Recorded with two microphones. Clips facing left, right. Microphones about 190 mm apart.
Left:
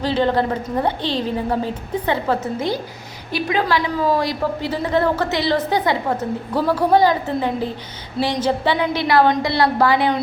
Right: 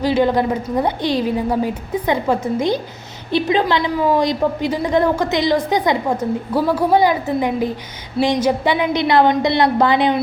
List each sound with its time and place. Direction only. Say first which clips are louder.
0.0 s a woman's voice: right 3 dB; 10° right (ahead or behind)